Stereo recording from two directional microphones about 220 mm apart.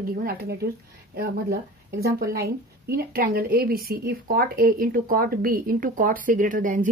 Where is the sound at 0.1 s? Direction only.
40° right (ahead or behind).